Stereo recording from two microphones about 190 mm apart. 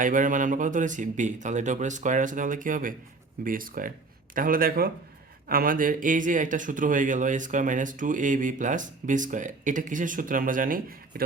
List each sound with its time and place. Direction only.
0.0 s a man's voice: 45° right (ahead or behind)